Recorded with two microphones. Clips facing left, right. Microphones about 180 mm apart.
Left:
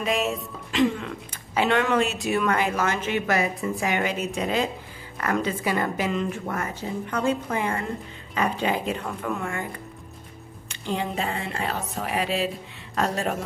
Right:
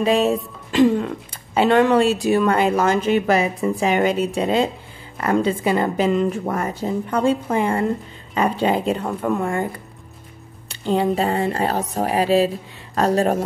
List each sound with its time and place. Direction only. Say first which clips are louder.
0.0 s speech: right 8 dB; 35° right (ahead or behind)
10.7 s speech: right 9 dB; 35° right (ahead or behind)